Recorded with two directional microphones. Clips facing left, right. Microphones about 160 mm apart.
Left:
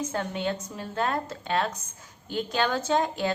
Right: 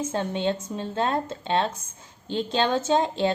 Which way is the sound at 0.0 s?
25° right (ahead or behind).